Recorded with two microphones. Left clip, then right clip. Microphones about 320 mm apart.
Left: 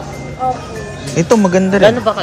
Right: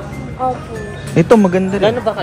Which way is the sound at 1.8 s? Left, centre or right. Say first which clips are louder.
Left 5 dB; left.